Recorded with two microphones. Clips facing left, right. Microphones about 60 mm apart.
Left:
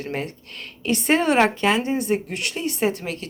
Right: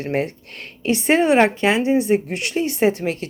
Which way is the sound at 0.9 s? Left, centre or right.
Centre.